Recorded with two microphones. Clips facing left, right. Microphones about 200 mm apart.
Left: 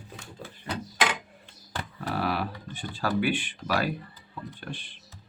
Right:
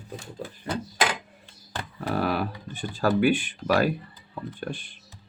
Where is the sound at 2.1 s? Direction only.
45° right (ahead or behind).